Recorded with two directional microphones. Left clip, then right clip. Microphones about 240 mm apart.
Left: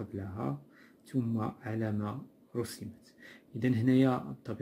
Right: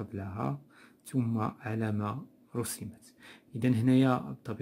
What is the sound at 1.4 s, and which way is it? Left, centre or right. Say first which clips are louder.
Speech: right 2 dB; right.